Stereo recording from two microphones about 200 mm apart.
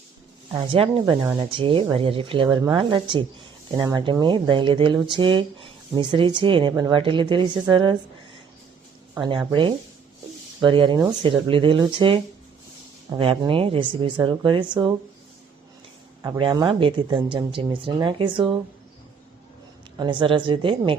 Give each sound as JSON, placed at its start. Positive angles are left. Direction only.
{"t": 0.5, "sound": "a woman's voice", "side_deg": -25}
{"t": 9.1, "sound": "a woman's voice", "side_deg": -20}
{"t": 16.2, "sound": "a woman's voice", "side_deg": -20}
{"t": 20.0, "sound": "a woman's voice", "side_deg": -25}